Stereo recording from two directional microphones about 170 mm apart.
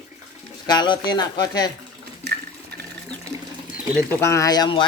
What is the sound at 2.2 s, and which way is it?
Toilet flush, 75° right (ahead or behind).